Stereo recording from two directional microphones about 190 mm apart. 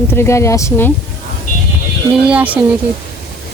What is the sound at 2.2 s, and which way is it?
Speech, 5° right (ahead or behind).